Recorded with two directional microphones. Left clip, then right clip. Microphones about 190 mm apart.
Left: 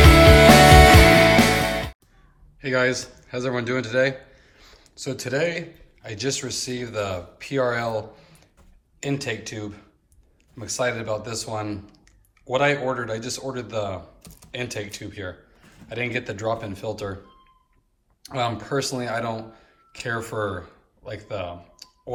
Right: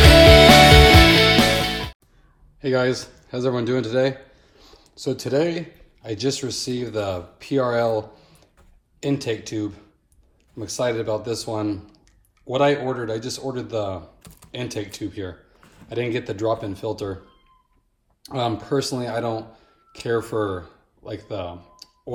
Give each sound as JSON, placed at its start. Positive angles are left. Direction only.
{"t": 0.0, "sound": "music", "side_deg": 0}
{"t": 2.6, "sound": "a man's voice", "side_deg": -20}
{"t": 18.2, "sound": "speech", "side_deg": -20}